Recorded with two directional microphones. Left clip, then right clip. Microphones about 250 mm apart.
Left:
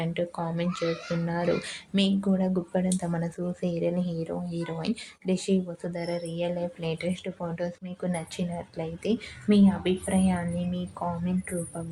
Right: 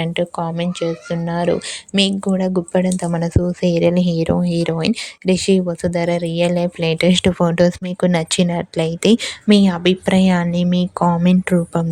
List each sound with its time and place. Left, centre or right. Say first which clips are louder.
0.0 s speech: right 10 dB; right